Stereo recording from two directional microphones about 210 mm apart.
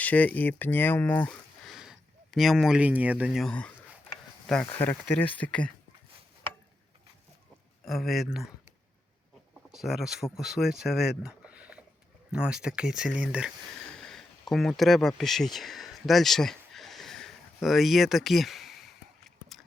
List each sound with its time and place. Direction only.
0.0 s speech: 5° left (ahead or behind)
7.9 s speech: centre (ahead or behind)
9.7 s speech: centre (ahead or behind)
14.0 s a sound: centre (ahead or behind)